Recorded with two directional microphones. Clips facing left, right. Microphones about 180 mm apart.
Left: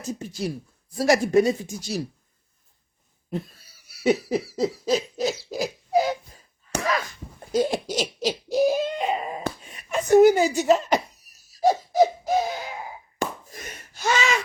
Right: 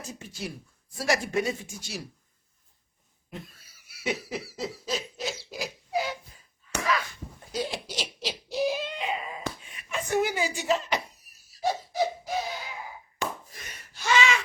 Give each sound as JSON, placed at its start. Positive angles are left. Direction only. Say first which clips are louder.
{"t": 0.0, "sound": "speech", "louder": "left 8 dB", "side_deg": 40}
{"t": 3.2, "sound": "cough", "louder": "left 11 dB", "side_deg": 35}
{"t": 5.5, "sound": "a sound", "louder": "left 8 dB", "side_deg": 40}